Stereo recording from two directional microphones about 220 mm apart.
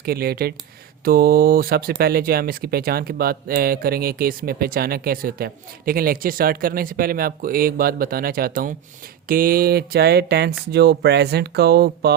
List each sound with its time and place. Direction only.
0.0 s speech: 45° right (ahead or behind)